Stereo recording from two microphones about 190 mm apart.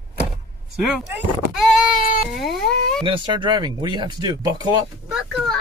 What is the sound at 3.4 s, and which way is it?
Speech, 25° right (ahead or behind).